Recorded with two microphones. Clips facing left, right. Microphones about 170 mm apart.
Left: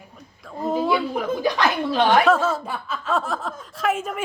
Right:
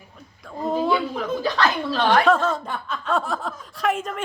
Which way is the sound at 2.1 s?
5° left (ahead or behind).